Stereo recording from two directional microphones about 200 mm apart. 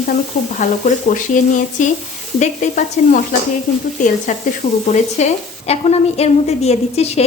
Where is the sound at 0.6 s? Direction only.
40° left (ahead or behind).